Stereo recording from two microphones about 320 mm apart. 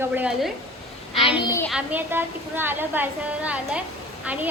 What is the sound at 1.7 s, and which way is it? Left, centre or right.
A woman's voice, centre.